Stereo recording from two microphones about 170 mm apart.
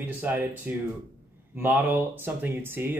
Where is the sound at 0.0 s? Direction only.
10° right (ahead or behind).